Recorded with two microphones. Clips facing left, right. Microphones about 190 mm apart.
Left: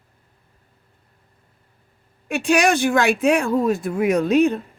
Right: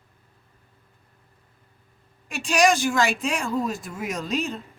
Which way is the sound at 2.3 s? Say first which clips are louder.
Left 3 dB; 60° left (ahead or behind).